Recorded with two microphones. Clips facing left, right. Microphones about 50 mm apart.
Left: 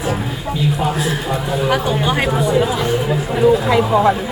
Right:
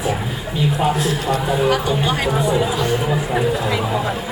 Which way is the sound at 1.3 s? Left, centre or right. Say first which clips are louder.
Right 1 dB; centre.